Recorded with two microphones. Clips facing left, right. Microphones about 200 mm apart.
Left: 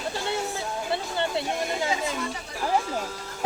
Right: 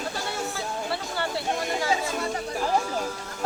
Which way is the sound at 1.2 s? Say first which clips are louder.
Even; 20° left (ahead or behind).